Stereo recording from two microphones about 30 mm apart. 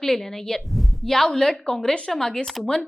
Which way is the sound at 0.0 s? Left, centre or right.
Centre.